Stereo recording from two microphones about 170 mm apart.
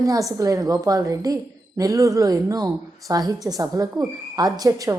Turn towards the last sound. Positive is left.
turn(degrees=-20)  # may be behind; listen again after turning